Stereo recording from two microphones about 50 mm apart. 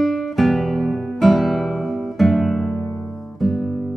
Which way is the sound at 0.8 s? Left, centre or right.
Centre.